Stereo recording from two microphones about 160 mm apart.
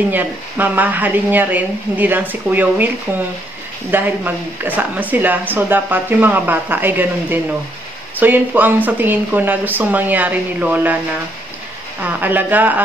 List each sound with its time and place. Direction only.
0.1 s speech: 10° right (ahead or behind)
12.0 s speech: 10° right (ahead or behind)